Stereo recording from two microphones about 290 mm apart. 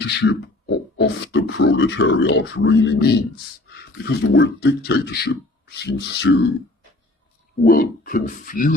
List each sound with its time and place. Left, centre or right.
0.2 s speech: left
7.6 s speech: left